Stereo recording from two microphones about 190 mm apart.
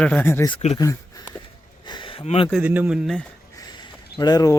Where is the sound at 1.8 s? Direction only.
25° left (ahead or behind).